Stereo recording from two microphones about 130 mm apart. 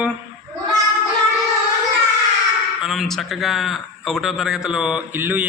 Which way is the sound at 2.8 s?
5° right (ahead or behind).